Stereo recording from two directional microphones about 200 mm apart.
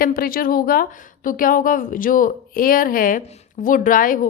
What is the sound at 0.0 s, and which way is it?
A woman's voice, 45° left (ahead or behind).